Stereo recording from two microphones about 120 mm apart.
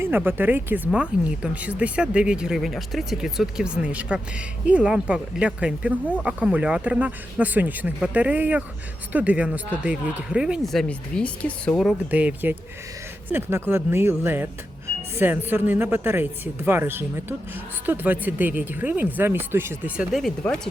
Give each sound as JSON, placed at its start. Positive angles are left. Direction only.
{"t": 0.0, "sound": "speech", "side_deg": -15}
{"t": 10.8, "sound": "speech", "side_deg": 10}
{"t": 12.1, "sound": "speech", "side_deg": -15}
{"t": 20.0, "sound": "speech", "side_deg": 0}